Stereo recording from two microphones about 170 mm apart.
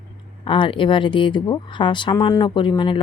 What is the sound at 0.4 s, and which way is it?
Speech, 30° left (ahead or behind).